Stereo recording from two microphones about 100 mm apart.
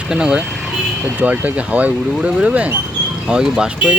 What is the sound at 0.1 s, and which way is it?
Speech, 5° right (ahead or behind).